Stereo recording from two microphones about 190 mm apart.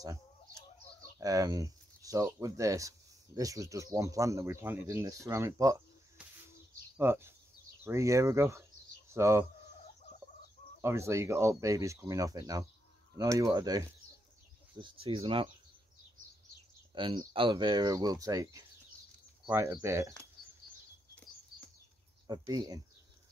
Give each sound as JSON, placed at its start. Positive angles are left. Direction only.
{"t": 1.1, "sound": "speech", "side_deg": -20}
{"t": 7.0, "sound": "speech", "side_deg": -10}
{"t": 10.8, "sound": "speech", "side_deg": -15}
{"t": 16.9, "sound": "speech", "side_deg": -25}
{"t": 22.3, "sound": "speech", "side_deg": -20}